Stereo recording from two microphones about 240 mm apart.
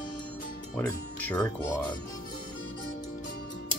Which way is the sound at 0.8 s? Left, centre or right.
Centre.